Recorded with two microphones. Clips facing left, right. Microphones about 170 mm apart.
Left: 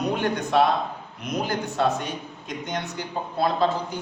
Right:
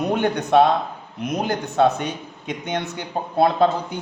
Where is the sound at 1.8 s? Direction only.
65° right (ahead or behind).